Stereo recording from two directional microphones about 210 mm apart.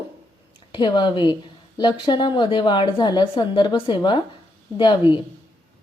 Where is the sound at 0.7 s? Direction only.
20° left (ahead or behind).